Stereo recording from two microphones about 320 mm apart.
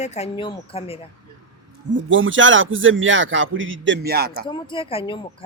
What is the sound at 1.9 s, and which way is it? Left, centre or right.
Speech, right.